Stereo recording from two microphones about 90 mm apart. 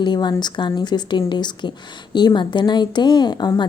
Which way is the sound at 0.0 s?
55° left (ahead or behind).